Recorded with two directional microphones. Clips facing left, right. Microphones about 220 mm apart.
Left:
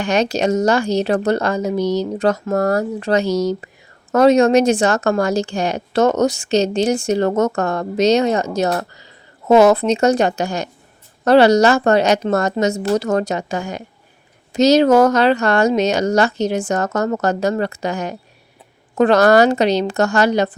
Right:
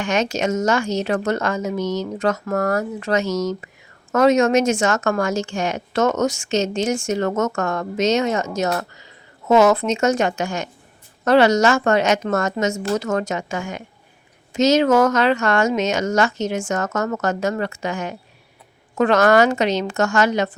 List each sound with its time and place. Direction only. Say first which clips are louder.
0.0 s a woman's voice: left 4 dB; 35° left (ahead or behind)